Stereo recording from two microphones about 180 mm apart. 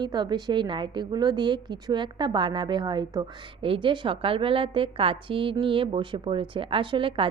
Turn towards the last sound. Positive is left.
turn(degrees=-30)  # may be behind; listen again after turning